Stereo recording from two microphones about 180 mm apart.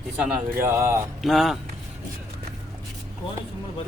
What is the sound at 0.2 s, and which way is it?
Speech, 5° right (ahead or behind).